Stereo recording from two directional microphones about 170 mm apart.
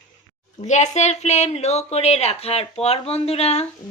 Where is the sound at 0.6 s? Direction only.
45° left (ahead or behind).